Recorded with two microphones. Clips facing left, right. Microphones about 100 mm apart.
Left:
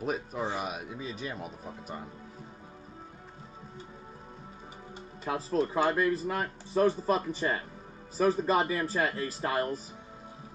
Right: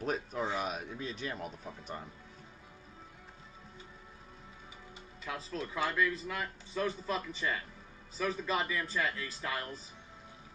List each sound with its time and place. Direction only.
0.0 s speech: 5° left (ahead or behind)
5.2 s speech: 40° left (ahead or behind)